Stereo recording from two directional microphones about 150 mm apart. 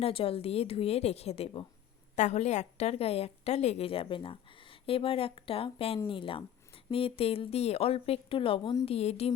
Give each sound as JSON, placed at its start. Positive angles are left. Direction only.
{"t": 0.0, "sound": "a woman's voice", "side_deg": 40}